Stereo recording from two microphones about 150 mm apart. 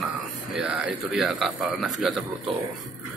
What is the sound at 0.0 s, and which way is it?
Speech, 5° right (ahead or behind).